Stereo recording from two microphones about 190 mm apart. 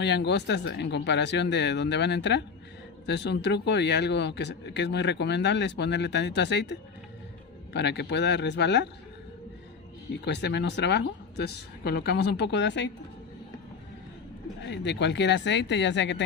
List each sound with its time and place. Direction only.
0.0 s speech: 65° left (ahead or behind)
10.2 s speech: 65° left (ahead or behind)
14.6 s speech: 65° left (ahead or behind)